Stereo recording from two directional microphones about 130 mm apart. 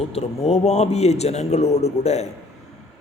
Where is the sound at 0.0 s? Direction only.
55° left (ahead or behind).